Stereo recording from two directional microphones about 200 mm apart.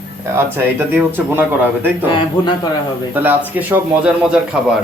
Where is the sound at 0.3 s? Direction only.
10° right (ahead or behind).